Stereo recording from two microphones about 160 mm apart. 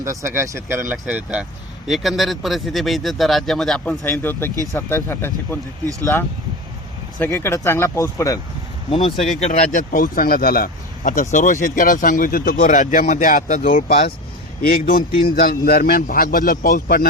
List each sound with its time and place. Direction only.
0.0 s speech: 20° right (ahead or behind); by 5.5 s 15° left (ahead or behind)
7.2 s speech: 15° left (ahead or behind)
8.9 s speech: 35° left (ahead or behind)
9.4 s speech: 50° left (ahead or behind)
9.7 s speech: 60° left (ahead or behind)
11.2 s speech: 50° left (ahead or behind)